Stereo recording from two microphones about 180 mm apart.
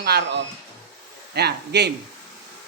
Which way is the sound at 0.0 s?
65° right (ahead or behind).